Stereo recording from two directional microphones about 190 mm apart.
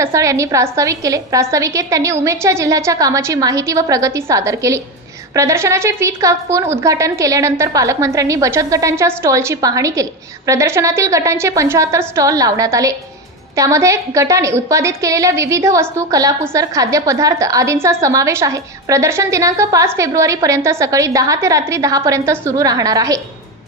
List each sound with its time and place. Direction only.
0.0 s a woman's voice: 15° right (ahead or behind)